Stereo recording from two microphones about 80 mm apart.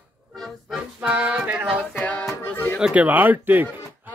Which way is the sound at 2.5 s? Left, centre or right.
Left.